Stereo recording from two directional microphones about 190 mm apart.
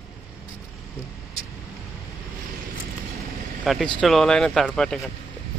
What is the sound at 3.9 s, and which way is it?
Speech, centre (ahead or behind).